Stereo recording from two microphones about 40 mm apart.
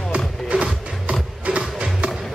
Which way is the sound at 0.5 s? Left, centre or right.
Right.